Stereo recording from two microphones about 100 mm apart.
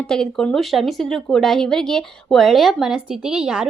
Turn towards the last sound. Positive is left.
turn(degrees=-5)  # may be behind; listen again after turning